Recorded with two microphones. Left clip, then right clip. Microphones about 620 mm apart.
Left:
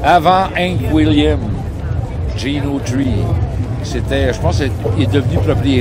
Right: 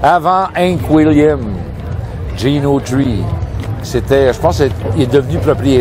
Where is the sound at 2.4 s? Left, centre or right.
Right.